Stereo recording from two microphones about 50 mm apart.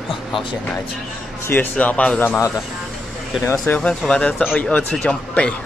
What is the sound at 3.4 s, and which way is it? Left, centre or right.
Speech, left.